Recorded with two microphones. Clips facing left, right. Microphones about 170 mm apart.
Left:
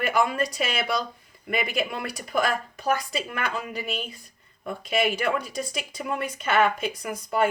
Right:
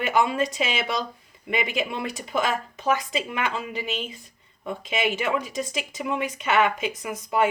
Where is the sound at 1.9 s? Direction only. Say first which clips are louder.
Right 2 dB; 25° right (ahead or behind).